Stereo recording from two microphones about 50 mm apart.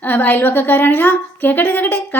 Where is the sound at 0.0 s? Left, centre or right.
Left.